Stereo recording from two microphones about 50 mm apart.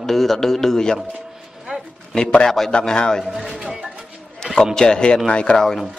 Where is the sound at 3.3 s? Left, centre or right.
Centre.